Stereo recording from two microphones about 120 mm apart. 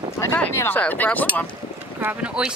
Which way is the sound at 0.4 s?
20° left (ahead or behind).